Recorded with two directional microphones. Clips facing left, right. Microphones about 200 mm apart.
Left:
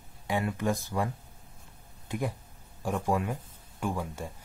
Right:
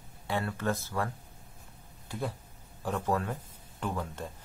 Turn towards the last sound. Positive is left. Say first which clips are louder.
# left 2 dB
turn(degrees=10)  # may be behind; listen again after turning